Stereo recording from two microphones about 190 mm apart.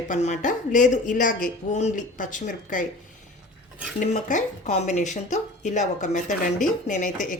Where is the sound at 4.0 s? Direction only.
40° left (ahead or behind).